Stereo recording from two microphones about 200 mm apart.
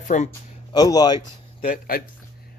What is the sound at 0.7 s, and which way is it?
Speech, 20° left (ahead or behind).